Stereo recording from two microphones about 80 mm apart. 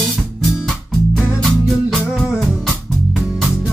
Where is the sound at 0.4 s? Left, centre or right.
Centre.